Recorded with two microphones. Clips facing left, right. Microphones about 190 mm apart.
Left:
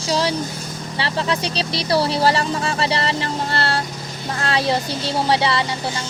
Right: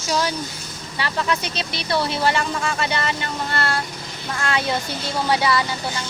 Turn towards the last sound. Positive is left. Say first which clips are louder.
# left 1 dB
turn(degrees=30)  # may be behind; listen again after turning